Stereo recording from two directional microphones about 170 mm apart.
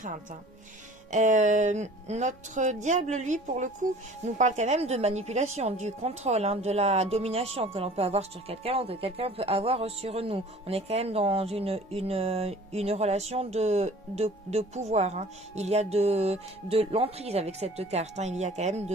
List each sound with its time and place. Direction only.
1.1 s speech: 45° right (ahead or behind)